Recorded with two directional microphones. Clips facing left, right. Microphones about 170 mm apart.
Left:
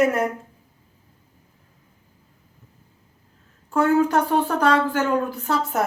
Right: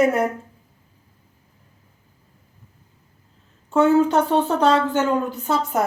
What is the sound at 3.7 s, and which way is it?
A woman's voice, 25° right (ahead or behind).